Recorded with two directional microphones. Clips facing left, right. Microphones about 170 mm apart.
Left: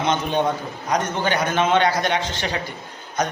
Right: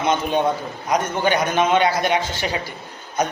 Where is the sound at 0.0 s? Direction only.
10° right (ahead or behind).